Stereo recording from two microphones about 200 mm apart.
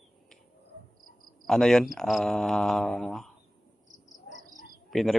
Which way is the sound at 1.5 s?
Centre (ahead or behind).